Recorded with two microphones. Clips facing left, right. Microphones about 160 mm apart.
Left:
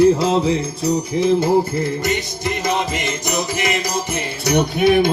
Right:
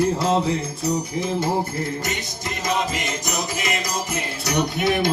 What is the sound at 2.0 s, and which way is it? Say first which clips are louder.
Music: left 7 dB; 70° left (ahead or behind).